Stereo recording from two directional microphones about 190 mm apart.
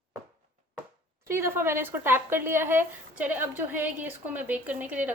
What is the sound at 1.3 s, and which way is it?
Speech, 15° right (ahead or behind).